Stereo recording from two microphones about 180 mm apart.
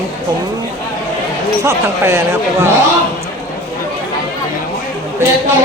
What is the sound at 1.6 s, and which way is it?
Speech, 15° right (ahead or behind).